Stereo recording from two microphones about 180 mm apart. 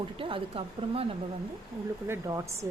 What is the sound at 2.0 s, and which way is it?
Speech, 15° right (ahead or behind).